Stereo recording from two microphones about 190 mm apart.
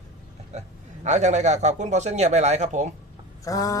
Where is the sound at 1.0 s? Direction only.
35° right (ahead or behind).